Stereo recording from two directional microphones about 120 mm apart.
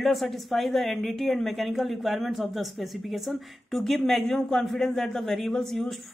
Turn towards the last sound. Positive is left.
turn(degrees=0)  # may be behind; listen again after turning